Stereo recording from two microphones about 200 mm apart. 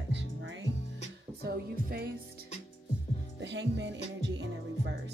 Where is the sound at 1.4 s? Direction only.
50° right (ahead or behind).